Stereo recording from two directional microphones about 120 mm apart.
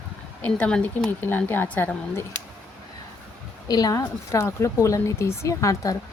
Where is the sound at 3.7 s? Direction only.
30° left (ahead or behind).